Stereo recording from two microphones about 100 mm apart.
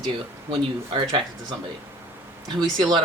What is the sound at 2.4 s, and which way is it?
Speech, 50° right (ahead or behind).